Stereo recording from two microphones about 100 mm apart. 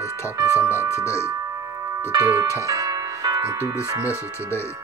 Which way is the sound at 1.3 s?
30° right (ahead or behind).